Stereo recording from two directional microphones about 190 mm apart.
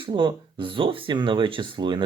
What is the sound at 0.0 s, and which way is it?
Speech, 25° right (ahead or behind).